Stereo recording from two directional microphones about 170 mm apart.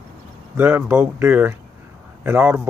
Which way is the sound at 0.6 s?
10° right (ahead or behind).